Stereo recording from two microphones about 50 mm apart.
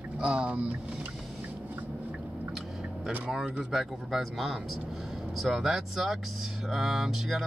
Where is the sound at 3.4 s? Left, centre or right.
Centre.